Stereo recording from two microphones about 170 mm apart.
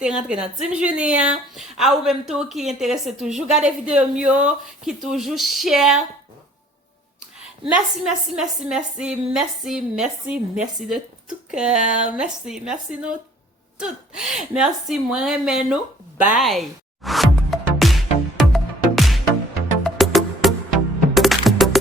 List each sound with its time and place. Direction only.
0.0 s a woman's voice: 5° right (ahead or behind)
7.7 s a woman's voice: 5° right (ahead or behind)
11.9 s speech: 45° right (ahead or behind)
12.1 s a woman's voice: 5° right (ahead or behind)
13.7 s a woman's voice: 5° right (ahead or behind)
16.2 s music: 5° right (ahead or behind)